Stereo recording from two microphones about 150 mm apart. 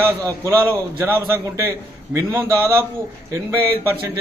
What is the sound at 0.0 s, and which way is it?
A man's voice, 20° right (ahead or behind).